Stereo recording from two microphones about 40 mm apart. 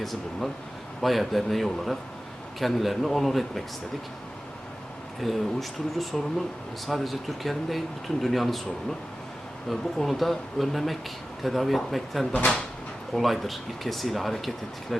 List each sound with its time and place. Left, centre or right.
0.0 s speech: centre
5.2 s speech: centre